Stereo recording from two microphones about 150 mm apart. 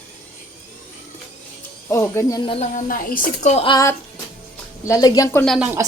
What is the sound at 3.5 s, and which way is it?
Speech, 35° left (ahead or behind).